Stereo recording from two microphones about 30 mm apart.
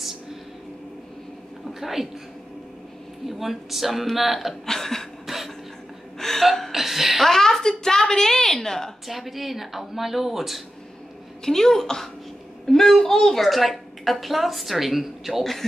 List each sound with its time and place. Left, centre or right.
1.7 s a woman's voice: centre
3.3 s speech: centre
4.6 s a woman's voice: centre
5.2 s a sound: centre
6.1 s gasp: centre
6.4 s speech: centre
6.7 s hiccup: centre
7.2 s a woman's voice: centre
9.0 s speech: centre
11.4 s a woman's voice: centre